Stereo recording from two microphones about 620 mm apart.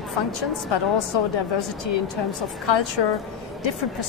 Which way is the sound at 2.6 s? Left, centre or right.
Left.